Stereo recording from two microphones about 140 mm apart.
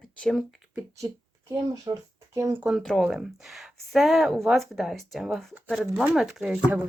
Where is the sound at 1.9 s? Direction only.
40° right (ahead or behind).